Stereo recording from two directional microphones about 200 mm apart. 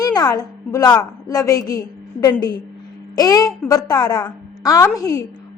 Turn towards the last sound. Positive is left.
turn(degrees=15)  # may be behind; listen again after turning